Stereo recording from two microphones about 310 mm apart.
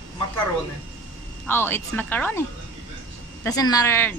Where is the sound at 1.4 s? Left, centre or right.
Centre.